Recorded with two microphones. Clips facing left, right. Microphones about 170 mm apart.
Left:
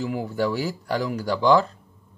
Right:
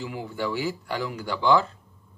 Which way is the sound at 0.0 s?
45° left (ahead or behind).